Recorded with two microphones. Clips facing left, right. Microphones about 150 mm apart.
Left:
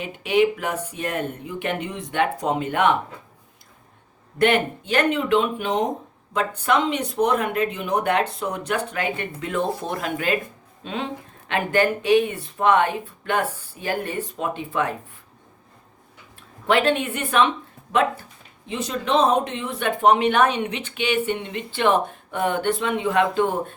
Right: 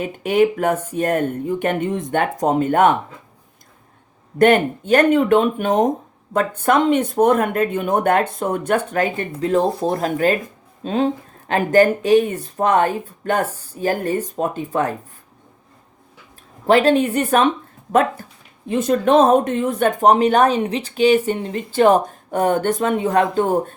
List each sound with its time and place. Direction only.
0.0 s speech: 45° right (ahead or behind)
4.4 s speech: 45° right (ahead or behind)
16.6 s speech: 40° right (ahead or behind)
18.7 s speech: 50° right (ahead or behind)